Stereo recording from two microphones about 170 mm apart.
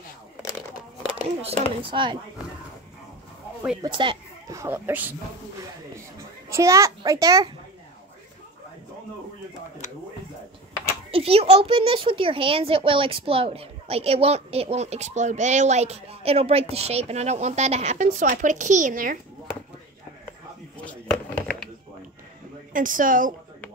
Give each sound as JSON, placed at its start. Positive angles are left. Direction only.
{"t": 1.8, "sound": "a child's voice", "side_deg": -30}
{"t": 3.8, "sound": "a sound", "side_deg": -30}
{"t": 4.6, "sound": "speech", "side_deg": -15}
{"t": 6.5, "sound": "a child's voice", "side_deg": -15}
{"t": 11.1, "sound": "a woman's voice", "side_deg": -35}
{"t": 20.7, "sound": "a sound", "side_deg": 5}
{"t": 22.7, "sound": "speech", "side_deg": -50}